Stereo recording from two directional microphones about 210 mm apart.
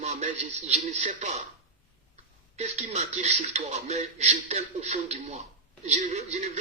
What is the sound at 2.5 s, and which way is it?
A man's voice, 30° right (ahead or behind).